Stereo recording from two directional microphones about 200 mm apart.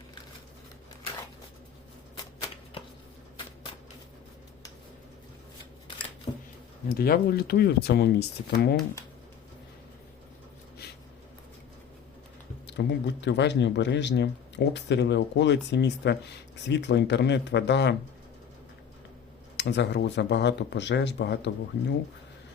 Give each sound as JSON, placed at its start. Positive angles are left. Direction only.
{"t": 6.8, "sound": "speech", "side_deg": 50}
{"t": 12.8, "sound": "speech", "side_deg": 60}
{"t": 19.5, "sound": "speech", "side_deg": 60}